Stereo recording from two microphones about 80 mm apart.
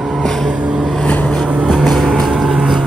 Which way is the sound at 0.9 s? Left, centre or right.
Centre.